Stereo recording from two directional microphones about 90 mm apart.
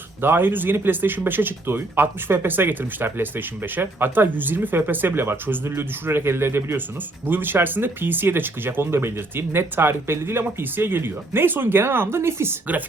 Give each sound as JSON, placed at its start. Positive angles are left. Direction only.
{"t": 0.2, "sound": "speech", "side_deg": -25}